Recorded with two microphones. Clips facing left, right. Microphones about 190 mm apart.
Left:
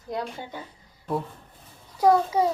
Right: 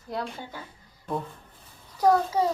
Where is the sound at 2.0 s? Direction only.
10° left (ahead or behind).